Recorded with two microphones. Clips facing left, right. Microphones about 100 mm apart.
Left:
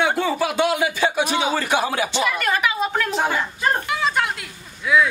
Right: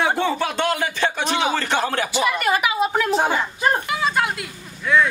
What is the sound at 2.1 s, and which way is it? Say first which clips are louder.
Speech: right 4 dB; 5° right (ahead or behind).